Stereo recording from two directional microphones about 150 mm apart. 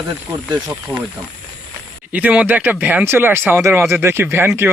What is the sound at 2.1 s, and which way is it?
Speech, 10° right (ahead or behind).